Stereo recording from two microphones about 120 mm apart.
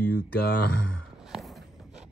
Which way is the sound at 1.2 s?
Centre (ahead or behind).